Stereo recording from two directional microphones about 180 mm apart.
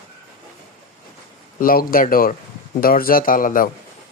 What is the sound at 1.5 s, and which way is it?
Speech, 50° left (ahead or behind).